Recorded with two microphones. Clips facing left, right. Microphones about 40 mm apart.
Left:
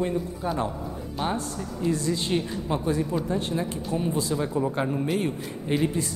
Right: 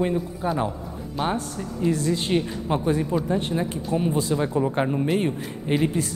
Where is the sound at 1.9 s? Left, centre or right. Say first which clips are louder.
Right 3 dB; right.